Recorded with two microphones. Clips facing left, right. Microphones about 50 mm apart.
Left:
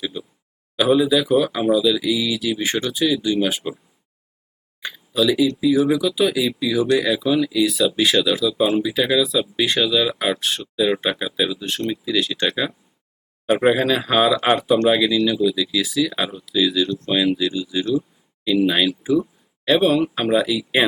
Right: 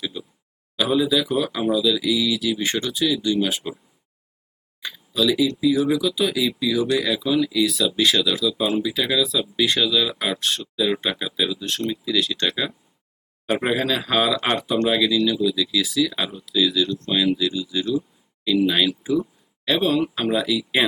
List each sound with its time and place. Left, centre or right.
0.0 s a sound: centre
0.8 s speech: centre
4.8 s a sound: centre
5.5 s speech: centre
10.3 s speech: centre
10.6 s speech: centre
15.8 s speech: centre
19.0 s a sound: centre
19.7 s speech: centre